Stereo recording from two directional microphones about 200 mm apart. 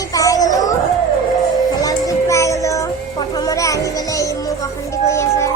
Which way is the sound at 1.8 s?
15° left (ahead or behind).